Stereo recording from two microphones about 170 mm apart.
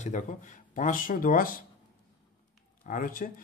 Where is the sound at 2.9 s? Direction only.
55° left (ahead or behind).